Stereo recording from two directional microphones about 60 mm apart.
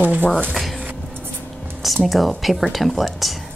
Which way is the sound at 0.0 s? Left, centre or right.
Right.